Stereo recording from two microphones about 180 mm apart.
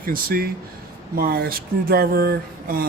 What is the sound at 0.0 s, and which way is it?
A man's voice, 55° right (ahead or behind).